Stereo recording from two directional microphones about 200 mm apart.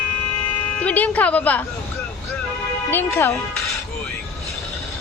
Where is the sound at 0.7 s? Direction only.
10° left (ahead or behind).